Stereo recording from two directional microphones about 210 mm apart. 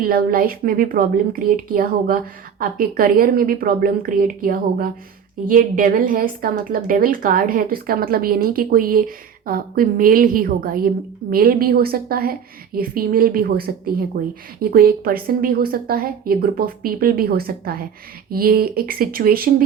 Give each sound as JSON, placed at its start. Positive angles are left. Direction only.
{"t": 0.0, "sound": "a woman's voice", "side_deg": -45}